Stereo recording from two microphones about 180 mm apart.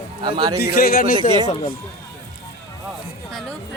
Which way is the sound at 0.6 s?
55° left (ahead or behind).